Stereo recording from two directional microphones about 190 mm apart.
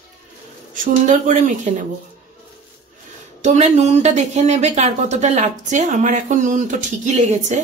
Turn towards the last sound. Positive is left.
turn(degrees=-40)  # may be behind; listen again after turning